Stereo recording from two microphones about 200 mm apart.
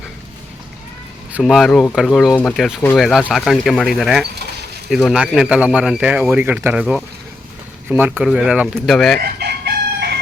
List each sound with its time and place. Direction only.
1.3 s speech: centre (ahead or behind)
9.2 s chicken: 55° right (ahead or behind)